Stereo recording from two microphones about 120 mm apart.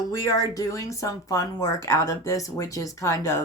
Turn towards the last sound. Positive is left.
turn(degrees=25)  # may be behind; listen again after turning